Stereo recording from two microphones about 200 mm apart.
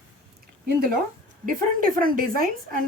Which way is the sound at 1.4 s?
45° right (ahead or behind).